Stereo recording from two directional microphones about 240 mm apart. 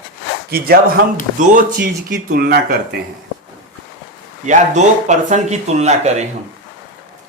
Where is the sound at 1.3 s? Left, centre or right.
Right.